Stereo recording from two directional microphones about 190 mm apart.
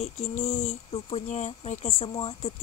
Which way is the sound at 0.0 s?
35° left (ahead or behind).